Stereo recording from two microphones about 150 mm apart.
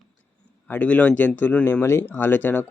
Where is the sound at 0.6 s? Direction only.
10° left (ahead or behind).